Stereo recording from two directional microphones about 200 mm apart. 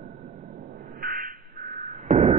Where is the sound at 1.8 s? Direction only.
35° right (ahead or behind).